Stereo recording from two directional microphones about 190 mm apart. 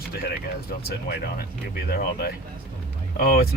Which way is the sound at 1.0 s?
55° left (ahead or behind).